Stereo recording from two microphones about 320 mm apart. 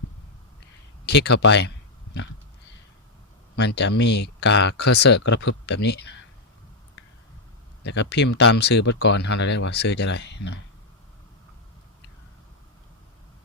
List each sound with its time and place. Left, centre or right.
1.0 s speech: left
3.5 s speech: left
7.9 s speech: left